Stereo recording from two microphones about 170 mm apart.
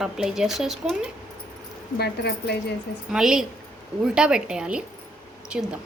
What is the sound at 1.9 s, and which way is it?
Speech, 75° left (ahead or behind).